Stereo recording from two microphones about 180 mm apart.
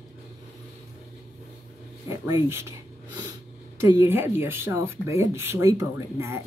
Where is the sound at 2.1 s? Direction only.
15° right (ahead or behind).